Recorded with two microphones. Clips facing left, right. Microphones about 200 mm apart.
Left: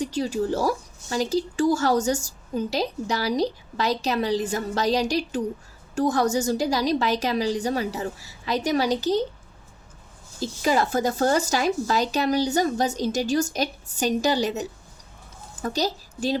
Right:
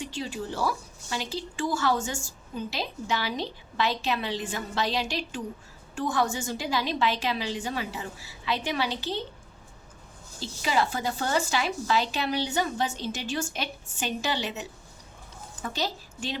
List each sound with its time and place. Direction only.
0.0 s speech: 40° left (ahead or behind)
10.4 s a woman's voice: 45° left (ahead or behind)